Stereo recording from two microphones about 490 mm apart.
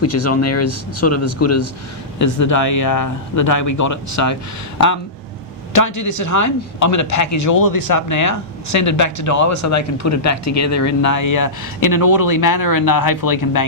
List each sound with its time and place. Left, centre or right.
0.0 s a man's voice: left
5.7 s a man's voice: left